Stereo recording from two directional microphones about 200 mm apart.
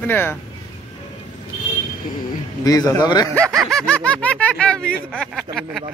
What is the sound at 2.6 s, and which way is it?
Speech, 20° left (ahead or behind).